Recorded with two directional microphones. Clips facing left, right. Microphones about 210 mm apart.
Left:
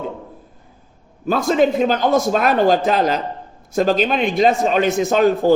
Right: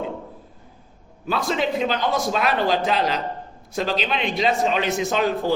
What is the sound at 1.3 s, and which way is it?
A man's voice, 45° left (ahead or behind).